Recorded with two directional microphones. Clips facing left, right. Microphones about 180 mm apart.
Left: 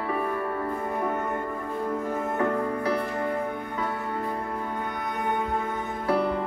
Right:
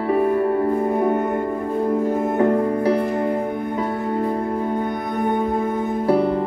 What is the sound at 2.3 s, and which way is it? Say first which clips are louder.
Music: right 8 dB; 25° right (ahead or behind).